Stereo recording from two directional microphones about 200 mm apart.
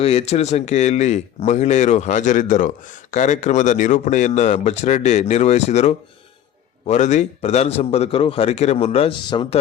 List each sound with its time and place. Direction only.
0.0 s speech: 30° left (ahead or behind)